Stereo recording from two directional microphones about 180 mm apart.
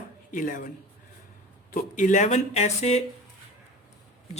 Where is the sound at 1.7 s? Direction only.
50° left (ahead or behind).